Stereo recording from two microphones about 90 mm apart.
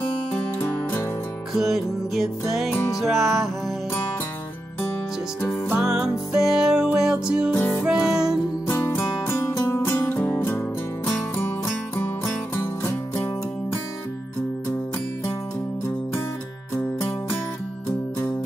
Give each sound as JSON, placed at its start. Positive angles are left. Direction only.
{"t": 0.0, "sound": "music", "side_deg": 20}
{"t": 1.5, "sound": "music", "side_deg": 0}
{"t": 5.7, "sound": "music", "side_deg": -10}
{"t": 7.5, "sound": "music", "side_deg": 20}
{"t": 7.8, "sound": "music", "side_deg": -10}
{"t": 8.6, "sound": "music", "side_deg": 25}
{"t": 16.7, "sound": "music", "side_deg": 30}